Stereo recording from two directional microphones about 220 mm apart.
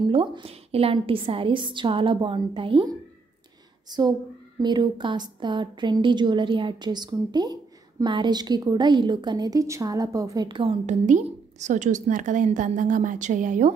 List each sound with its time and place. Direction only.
0.0 s a woman's voice: 25° right (ahead or behind)
4.6 s a woman's voice: 20° right (ahead or behind); by 13.7 s 35° right (ahead or behind)